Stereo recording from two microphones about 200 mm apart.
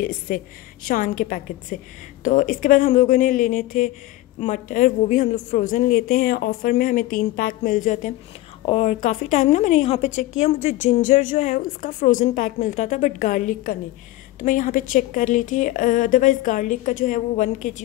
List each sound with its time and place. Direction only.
0.0 s a woman's voice: 45° left (ahead or behind)
8.6 s speech: 25° left (ahead or behind)
9.0 s a woman's voice: 40° left (ahead or behind)